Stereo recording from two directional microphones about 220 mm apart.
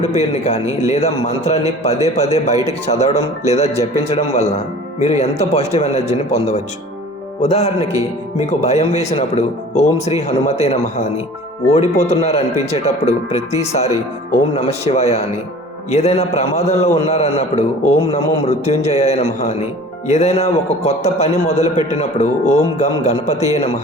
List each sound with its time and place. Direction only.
0.0 s speech: 30° left (ahead or behind)
0.6 s a man's voice: 15° right (ahead or behind)
0.9 s a man's voice: 30° left (ahead or behind)